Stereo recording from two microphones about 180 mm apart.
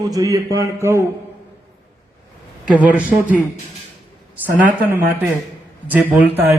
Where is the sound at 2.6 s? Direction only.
10° right (ahead or behind).